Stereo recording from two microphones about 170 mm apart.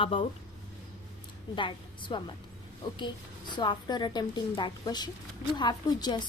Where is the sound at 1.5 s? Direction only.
30° left (ahead or behind).